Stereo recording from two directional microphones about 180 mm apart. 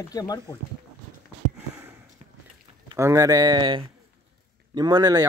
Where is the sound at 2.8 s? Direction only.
15° right (ahead or behind).